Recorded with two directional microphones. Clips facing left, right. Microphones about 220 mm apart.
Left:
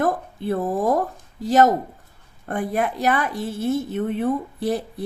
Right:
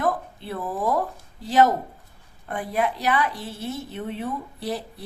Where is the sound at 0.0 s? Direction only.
45° left (ahead or behind).